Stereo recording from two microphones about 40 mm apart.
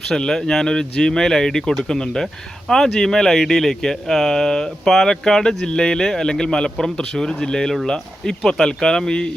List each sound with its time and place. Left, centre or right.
0.2 s speech: centre